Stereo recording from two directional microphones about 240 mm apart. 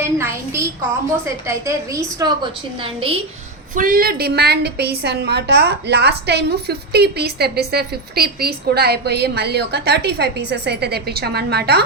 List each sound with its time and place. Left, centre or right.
0.2 s a woman's voice: centre
3.8 s a woman's voice: right